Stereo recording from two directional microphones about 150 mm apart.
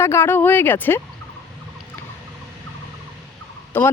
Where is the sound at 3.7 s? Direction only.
15° left (ahead or behind).